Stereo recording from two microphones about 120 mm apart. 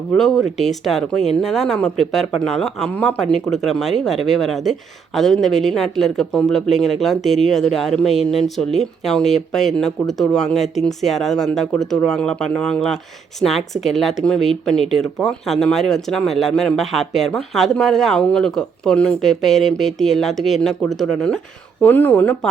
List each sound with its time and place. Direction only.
0.1 s speech: centre (ahead or behind)
21.8 s speech: 15° left (ahead or behind)